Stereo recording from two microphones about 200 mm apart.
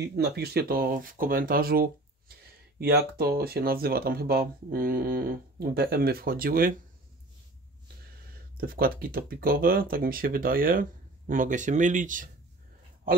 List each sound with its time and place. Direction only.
0.0 s speech: 55° right (ahead or behind)
8.5 s speech: 45° right (ahead or behind)